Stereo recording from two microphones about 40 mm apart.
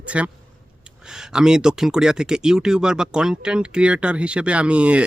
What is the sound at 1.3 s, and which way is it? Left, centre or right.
Speech, centre.